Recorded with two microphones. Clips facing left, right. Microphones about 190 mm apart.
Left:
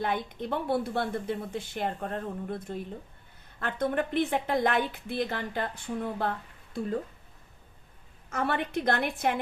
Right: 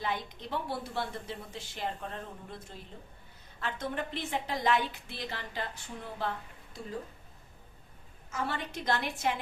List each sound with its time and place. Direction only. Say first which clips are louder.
0.0 s speech: left 5 dB; 55° left (ahead or behind)
8.3 s speech: left 6 dB; 60° left (ahead or behind)